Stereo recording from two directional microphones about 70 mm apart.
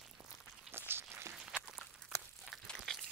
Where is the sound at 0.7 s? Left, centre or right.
Right.